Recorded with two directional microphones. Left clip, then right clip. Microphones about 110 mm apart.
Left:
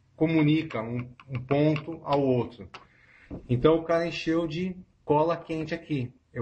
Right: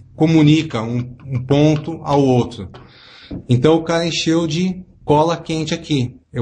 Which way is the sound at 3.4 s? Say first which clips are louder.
Right 8 dB; 40° right (ahead or behind).